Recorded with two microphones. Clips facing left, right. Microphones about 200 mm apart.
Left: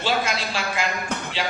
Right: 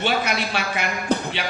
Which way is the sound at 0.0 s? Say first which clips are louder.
Right 1 dB; 65° right (ahead or behind).